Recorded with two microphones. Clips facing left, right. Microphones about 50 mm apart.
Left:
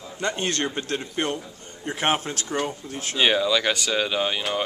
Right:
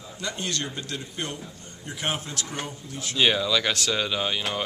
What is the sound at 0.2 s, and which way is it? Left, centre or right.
Speech, left.